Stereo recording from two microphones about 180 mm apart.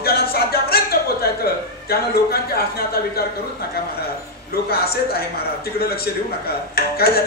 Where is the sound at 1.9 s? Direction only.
60° left (ahead or behind).